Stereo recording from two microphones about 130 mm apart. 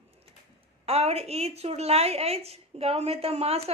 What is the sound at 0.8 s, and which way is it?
A woman's voice, 50° right (ahead or behind).